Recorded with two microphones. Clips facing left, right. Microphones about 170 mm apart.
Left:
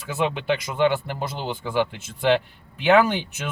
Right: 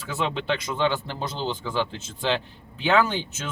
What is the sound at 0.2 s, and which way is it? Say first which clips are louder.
Speech: left 3 dB; 10° left (ahead or behind).